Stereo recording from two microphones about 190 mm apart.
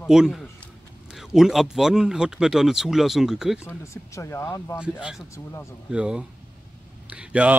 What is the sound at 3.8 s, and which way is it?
Speech, 15° left (ahead or behind).